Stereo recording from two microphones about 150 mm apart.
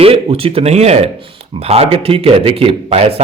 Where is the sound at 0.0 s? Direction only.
40° right (ahead or behind).